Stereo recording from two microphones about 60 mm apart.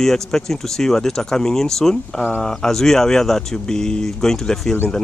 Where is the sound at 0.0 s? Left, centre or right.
Centre.